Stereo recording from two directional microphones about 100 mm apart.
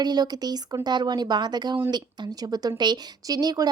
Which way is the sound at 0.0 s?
45° right (ahead or behind).